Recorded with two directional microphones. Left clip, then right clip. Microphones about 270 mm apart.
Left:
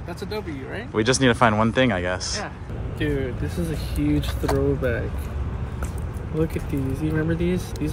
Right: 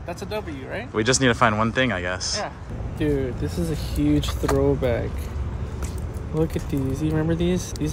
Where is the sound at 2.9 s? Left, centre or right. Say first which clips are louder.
Right 2 dB; right.